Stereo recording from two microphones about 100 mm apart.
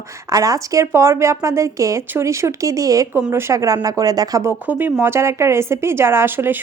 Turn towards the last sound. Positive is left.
turn(degrees=-20)  # may be behind; listen again after turning